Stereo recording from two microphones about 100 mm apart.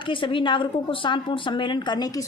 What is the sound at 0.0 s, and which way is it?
Speech, 60° left (ahead or behind).